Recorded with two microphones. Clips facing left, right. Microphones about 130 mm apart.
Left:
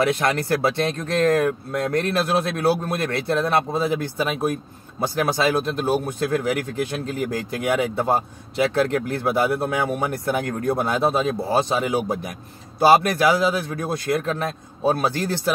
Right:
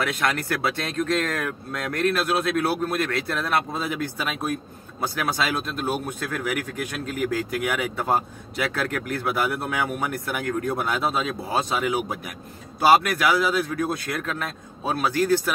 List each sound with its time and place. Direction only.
0.0 s speech: 25° left (ahead or behind)
7.7 s speech: 25° left (ahead or behind)